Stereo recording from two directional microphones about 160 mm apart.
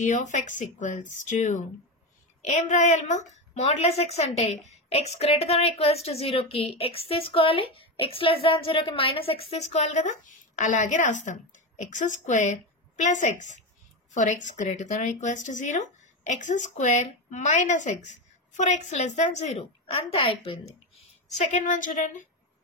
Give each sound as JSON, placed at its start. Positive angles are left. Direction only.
{"t": 0.0, "sound": "a woman's voice", "side_deg": 50}
{"t": 20.9, "sound": "a woman's voice", "side_deg": 45}